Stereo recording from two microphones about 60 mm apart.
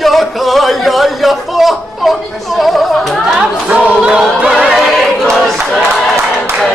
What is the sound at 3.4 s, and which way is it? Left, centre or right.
Chatter, right.